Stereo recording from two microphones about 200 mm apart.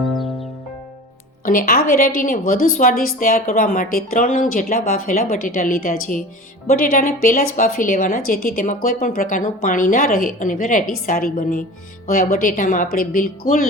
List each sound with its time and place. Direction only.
1.5 s a woman's voice: 45° left (ahead or behind)